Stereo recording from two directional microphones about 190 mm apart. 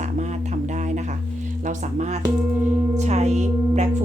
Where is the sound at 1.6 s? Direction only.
40° right (ahead or behind).